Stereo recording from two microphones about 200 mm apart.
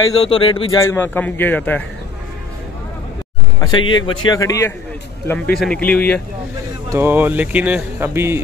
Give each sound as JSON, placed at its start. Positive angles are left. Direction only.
{"t": 0.1, "sound": "a man's voice", "side_deg": 30}
{"t": 3.6, "sound": "a man's voice", "side_deg": 25}
{"t": 5.3, "sound": "a man's voice", "side_deg": 5}
{"t": 6.9, "sound": "speech", "side_deg": -10}